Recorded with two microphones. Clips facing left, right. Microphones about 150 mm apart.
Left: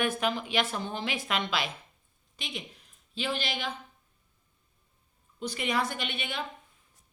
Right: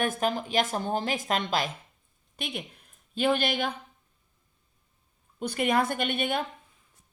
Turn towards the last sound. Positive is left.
turn(degrees=-50)  # may be behind; listen again after turning